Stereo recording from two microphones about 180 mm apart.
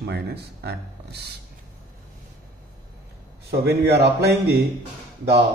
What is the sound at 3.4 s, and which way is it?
Speech, 65° right (ahead or behind).